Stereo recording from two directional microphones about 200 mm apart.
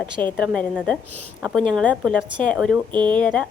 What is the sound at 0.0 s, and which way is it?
A woman's voice, 5° left (ahead or behind).